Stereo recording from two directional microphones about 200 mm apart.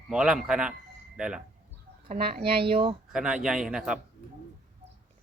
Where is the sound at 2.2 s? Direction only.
50° right (ahead or behind).